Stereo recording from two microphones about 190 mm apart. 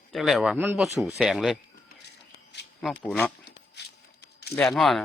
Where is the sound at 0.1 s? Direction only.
Centre (ahead or behind).